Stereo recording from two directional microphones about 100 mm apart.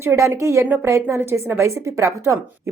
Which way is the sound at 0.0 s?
25° right (ahead or behind).